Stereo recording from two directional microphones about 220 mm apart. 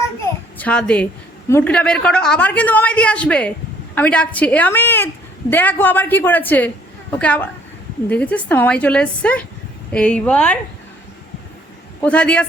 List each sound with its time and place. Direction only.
0.6 s a woman's voice: 5° left (ahead or behind)
12.0 s a woman's voice: 5° left (ahead or behind)